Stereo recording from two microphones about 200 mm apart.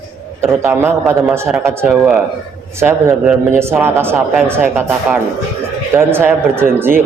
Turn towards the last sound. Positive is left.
turn(degrees=-10)  # may be behind; listen again after turning